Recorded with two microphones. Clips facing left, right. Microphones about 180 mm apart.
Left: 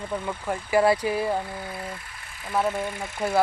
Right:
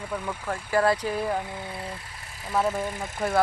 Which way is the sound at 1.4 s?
20° right (ahead or behind).